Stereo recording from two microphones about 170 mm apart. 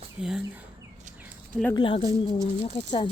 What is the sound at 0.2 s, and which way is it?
Speech, 5° right (ahead or behind).